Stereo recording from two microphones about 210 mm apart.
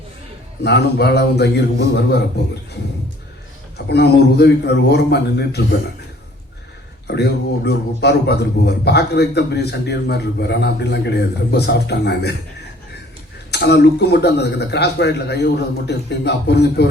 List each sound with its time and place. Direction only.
0.6 s a man's voice: 50° left (ahead or behind)
3.8 s a man's voice: 50° left (ahead or behind)
7.1 s a man's voice: 50° left (ahead or behind)
13.5 s a man's voice: 50° left (ahead or behind)